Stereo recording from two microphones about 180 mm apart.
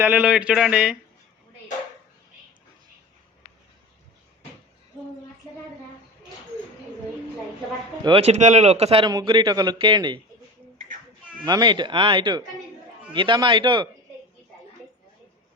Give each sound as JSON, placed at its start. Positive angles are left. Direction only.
{"t": 0.0, "sound": "speech", "side_deg": -10}
{"t": 8.0, "sound": "a man's voice", "side_deg": -30}
{"t": 11.4, "sound": "a man's voice", "side_deg": -25}